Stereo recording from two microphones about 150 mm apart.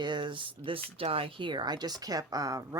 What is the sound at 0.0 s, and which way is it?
Speech, 30° right (ahead or behind).